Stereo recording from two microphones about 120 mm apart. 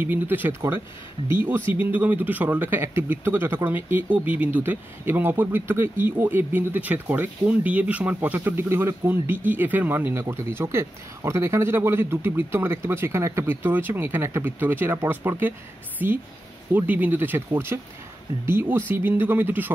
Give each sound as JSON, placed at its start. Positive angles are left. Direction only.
{"t": 0.0, "sound": "speech", "side_deg": -15}